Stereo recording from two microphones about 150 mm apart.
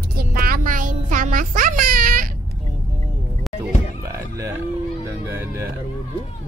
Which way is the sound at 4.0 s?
20° right (ahead or behind).